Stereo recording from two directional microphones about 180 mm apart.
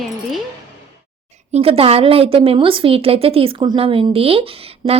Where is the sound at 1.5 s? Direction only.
35° right (ahead or behind).